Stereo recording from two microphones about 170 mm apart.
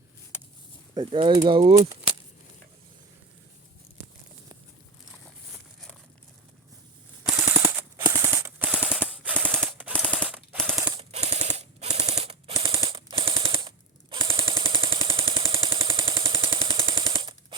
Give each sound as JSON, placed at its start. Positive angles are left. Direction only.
{"t": 0.9, "sound": "speech", "side_deg": -30}
{"t": 7.5, "sound": "machine gun", "side_deg": -15}
{"t": 9.9, "sound": "machine gun", "side_deg": 5}
{"t": 10.2, "sound": "machine gun", "side_deg": -5}
{"t": 10.8, "sound": "machine gun", "side_deg": -25}
{"t": 11.1, "sound": "machine gun", "side_deg": -40}
{"t": 15.1, "sound": "a sound", "side_deg": -35}